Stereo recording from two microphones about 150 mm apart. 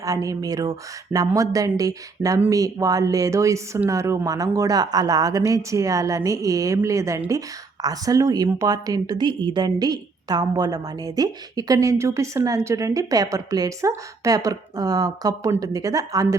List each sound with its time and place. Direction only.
0.0 s speech: 25° right (ahead or behind)